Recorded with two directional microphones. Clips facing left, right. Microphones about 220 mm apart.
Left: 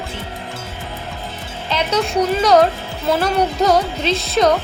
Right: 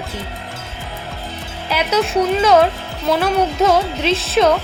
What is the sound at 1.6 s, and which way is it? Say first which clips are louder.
A woman's voice: right 1 dB; 5° right (ahead or behind).